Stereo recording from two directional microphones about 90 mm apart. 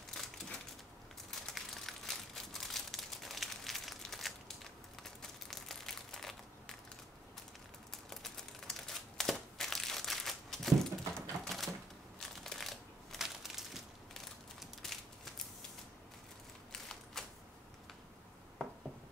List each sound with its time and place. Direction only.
0.1 s a sound: 5° left (ahead or behind)
1.4 s crumpling: 5° left (ahead or behind)
7.9 s crumpling: 5° left (ahead or behind)
11.1 s typewriter: centre (ahead or behind)
12.2 s crushing: 5° left (ahead or behind)
16.7 s typewriter: 5° left (ahead or behind)